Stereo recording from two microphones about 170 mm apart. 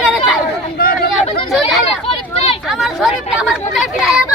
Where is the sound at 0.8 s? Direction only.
60° left (ahead or behind).